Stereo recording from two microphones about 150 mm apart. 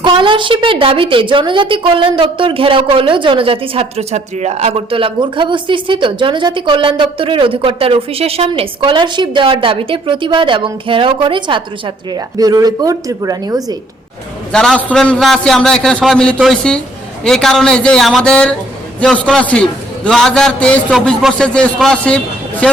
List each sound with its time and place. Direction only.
0.0 s a woman's voice: 30° right (ahead or behind)
14.5 s a man's voice: 5° left (ahead or behind)